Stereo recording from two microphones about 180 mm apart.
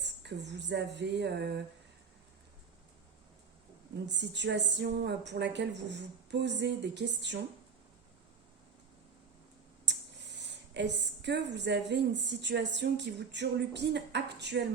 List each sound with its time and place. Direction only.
0.0 s a woman's voice: 70° right (ahead or behind)
4.0 s a woman's voice: 75° right (ahead or behind)
9.8 s a woman's voice: 75° right (ahead or behind)